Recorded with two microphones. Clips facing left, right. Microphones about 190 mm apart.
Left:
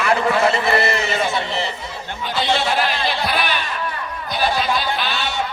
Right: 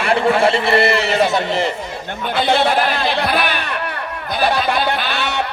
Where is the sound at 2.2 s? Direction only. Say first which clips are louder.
Right 4 dB; 55° right (ahead or behind).